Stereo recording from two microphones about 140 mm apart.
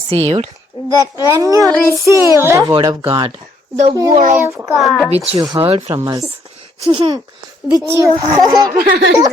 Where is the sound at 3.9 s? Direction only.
25° right (ahead or behind).